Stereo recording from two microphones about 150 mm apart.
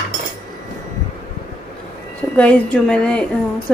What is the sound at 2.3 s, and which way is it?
Speech, 10° left (ahead or behind).